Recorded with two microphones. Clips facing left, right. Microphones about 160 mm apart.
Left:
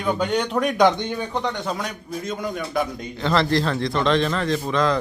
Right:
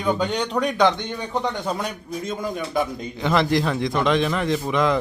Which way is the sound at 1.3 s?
5° right (ahead or behind).